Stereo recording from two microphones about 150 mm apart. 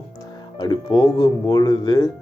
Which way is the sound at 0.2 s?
30° left (ahead or behind).